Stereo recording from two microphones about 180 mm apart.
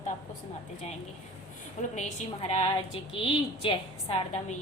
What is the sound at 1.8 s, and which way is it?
A woman's voice, 40° left (ahead or behind).